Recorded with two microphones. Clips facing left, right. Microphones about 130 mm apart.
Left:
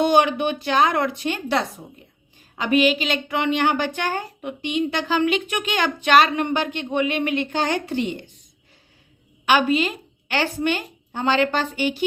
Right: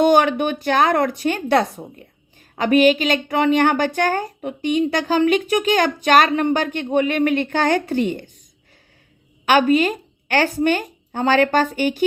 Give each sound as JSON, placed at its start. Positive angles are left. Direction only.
{"t": 0.0, "sound": "a woman's voice", "side_deg": -50}
{"t": 9.5, "sound": "a woman's voice", "side_deg": -45}